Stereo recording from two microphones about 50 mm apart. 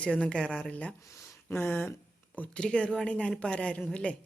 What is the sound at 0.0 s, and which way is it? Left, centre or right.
Speech, centre.